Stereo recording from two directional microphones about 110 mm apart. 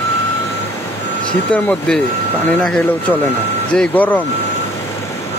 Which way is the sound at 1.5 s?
10° left (ahead or behind).